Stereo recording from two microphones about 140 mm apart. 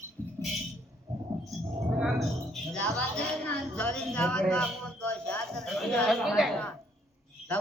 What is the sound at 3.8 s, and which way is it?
A woman's voice, 5° left (ahead or behind).